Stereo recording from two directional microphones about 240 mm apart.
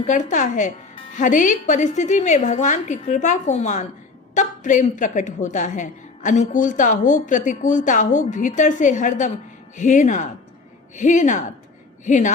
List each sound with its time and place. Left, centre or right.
0.0 s a woman's voice: left